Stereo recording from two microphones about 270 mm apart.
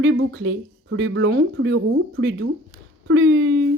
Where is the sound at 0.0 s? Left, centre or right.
Right.